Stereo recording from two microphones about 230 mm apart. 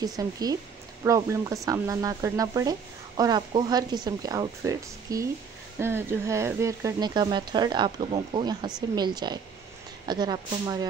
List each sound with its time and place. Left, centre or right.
0.0 s speech: centre